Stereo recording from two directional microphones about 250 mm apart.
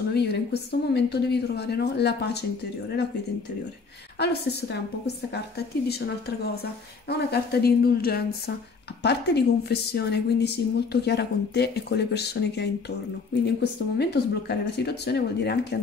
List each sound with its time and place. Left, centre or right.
0.1 s a woman's voice: left
4.2 s a woman's voice: left